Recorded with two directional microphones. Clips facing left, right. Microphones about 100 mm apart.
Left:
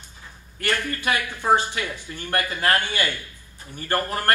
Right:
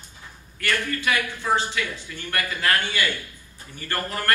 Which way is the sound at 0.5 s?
45° left (ahead or behind).